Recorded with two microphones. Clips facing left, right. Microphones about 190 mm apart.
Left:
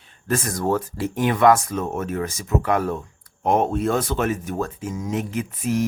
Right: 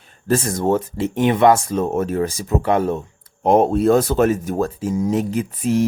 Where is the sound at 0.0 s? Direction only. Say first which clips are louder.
Right 6 dB; 45° right (ahead or behind).